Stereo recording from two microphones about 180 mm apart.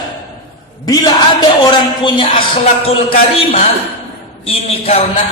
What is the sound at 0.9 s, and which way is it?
A man's voice, 20° left (ahead or behind).